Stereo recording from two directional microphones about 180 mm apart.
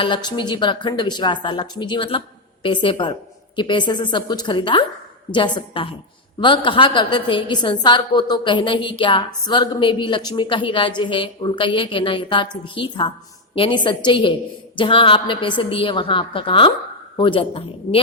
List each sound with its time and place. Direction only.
0.0 s a woman's voice: 25° left (ahead or behind)